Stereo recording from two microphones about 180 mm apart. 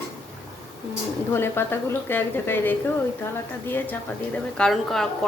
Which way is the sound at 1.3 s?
10° left (ahead or behind).